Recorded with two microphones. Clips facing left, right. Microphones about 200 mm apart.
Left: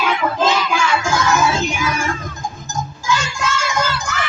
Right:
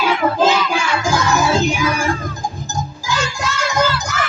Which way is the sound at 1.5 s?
35° right (ahead or behind).